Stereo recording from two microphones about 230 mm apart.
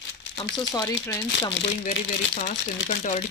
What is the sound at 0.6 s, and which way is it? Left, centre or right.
Speech, centre.